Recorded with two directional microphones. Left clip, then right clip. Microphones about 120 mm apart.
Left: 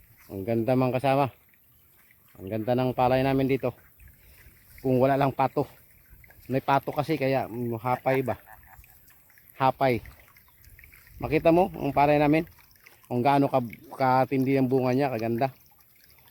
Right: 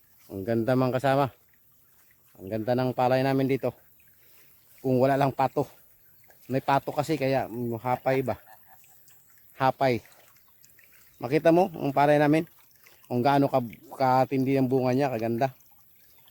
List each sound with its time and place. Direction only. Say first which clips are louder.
0.3 s speech: even; 30° right (ahead or behind)
2.5 s speech: even; 20° right (ahead or behind)
4.9 s speech: even; 20° right (ahead or behind)
9.6 s speech: left 1 dB; 20° right (ahead or behind)
11.2 s speech: even; 30° right (ahead or behind)